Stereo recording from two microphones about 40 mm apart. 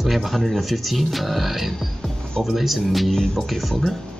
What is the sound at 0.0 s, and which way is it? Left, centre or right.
Speech, centre.